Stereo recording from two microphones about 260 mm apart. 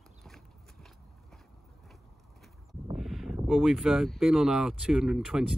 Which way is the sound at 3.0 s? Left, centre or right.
Centre.